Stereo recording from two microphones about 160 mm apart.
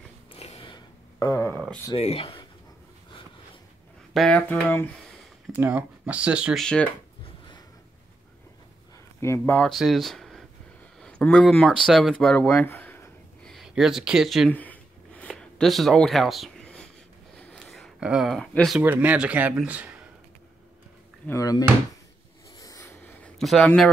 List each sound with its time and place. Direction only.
0.3 s a sound: 35° left (ahead or behind); by 1.6 s 20° left (ahead or behind)
2.0 s speech: 35° left (ahead or behind)
4.1 s speech: 5° left (ahead or behind)
5.6 s speech: 10° right (ahead or behind)
6.6 s speech: 5° left (ahead or behind)
9.2 s speech: 15° left (ahead or behind)
9.6 s speech: centre (ahead or behind)
13.5 s speech: centre (ahead or behind)
14.5 s a sound: 10° left (ahead or behind)
18.8 s speech: 10° right (ahead or behind)
21.3 s speech: 20° left (ahead or behind)
22.6 s a sound: 20° left (ahead or behind)
23.2 s speech: centre (ahead or behind)